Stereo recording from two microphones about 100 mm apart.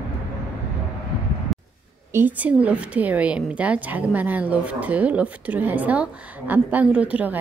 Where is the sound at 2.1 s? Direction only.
15° right (ahead or behind).